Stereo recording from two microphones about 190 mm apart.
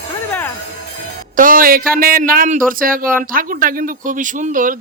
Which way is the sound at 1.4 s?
45° right (ahead or behind).